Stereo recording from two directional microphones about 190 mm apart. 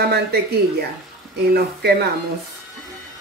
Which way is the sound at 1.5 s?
55° right (ahead or behind).